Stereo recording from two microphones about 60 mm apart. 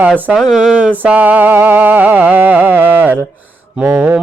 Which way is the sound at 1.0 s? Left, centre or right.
Right.